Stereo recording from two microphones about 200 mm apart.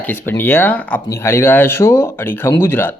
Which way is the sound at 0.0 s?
10° left (ahead or behind).